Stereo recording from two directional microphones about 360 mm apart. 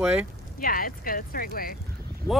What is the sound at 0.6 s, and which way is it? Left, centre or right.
Speech, left.